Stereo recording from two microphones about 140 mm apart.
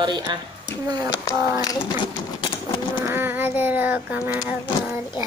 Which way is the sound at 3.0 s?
15° right (ahead or behind).